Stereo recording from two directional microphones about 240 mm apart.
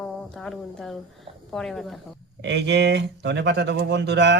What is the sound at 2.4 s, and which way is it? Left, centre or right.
Speech, right.